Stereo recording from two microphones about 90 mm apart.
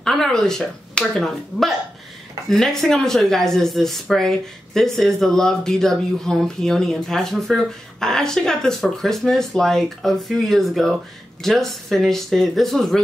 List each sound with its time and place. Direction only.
0.0 s speech: 5° left (ahead or behind)